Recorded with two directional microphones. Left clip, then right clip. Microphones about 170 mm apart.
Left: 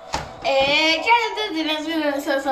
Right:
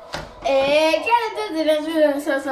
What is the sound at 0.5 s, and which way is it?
Child singing, 5° right (ahead or behind).